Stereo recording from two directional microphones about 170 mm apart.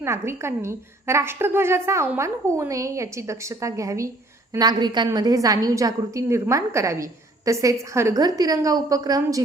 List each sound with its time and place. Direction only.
0.0 s a woman's voice: 15° right (ahead or behind)